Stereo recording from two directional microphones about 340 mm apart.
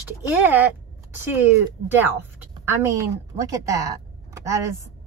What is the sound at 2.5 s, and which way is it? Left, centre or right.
A woman's voice, centre.